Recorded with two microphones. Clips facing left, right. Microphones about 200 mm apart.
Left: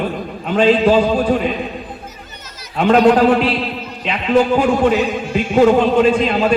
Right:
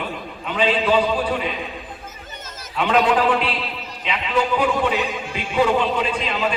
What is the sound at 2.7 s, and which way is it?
A man's voice, 45° left (ahead or behind).